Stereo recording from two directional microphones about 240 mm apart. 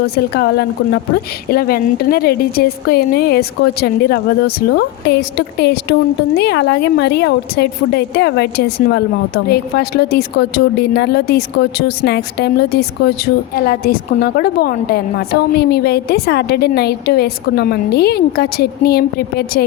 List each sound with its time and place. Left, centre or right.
0.2 s a woman's voice: left